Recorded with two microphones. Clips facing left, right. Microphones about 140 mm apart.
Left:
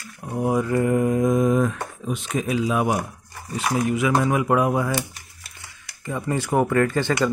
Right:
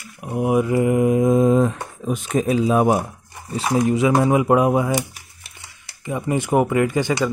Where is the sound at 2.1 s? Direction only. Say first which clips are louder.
Right 5 dB; 45° right (ahead or behind); by 7.3 s 15° right (ahead or behind).